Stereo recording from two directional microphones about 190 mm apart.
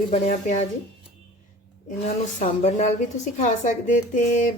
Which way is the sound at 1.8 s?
40° left (ahead or behind).